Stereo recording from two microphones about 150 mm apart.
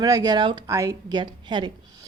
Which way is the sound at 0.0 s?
25° right (ahead or behind).